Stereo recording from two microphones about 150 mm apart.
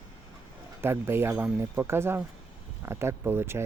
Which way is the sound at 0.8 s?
15° right (ahead or behind).